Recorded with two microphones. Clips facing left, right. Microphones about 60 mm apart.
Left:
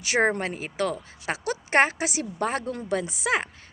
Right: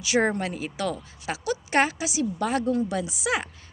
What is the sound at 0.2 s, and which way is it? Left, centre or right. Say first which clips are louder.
Speech: left 1 dB; left.